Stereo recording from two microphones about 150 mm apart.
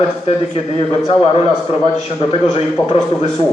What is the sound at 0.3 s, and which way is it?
A man's voice, 40° left (ahead or behind).